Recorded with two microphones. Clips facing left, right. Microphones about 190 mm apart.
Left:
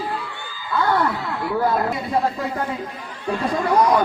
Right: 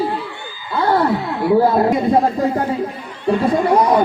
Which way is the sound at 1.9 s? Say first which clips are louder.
Right 7 dB; 45° right (ahead or behind).